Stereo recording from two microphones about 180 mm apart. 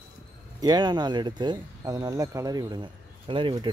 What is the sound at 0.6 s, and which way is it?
Speech, 25° right (ahead or behind).